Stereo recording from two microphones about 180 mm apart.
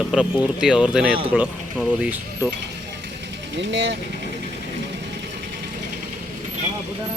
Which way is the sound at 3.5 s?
90° right.